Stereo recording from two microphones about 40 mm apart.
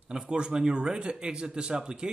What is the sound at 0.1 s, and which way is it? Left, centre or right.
A man's voice, right.